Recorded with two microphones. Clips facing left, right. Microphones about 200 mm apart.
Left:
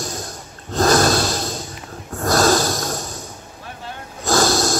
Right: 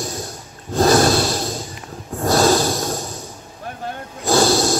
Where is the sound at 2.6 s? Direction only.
15° right (ahead or behind).